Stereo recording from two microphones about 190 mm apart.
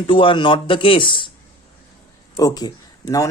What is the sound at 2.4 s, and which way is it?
Speech, 20° left (ahead or behind).